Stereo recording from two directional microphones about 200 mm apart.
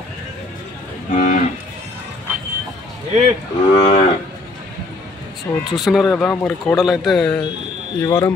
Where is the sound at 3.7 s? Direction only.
35° left (ahead or behind).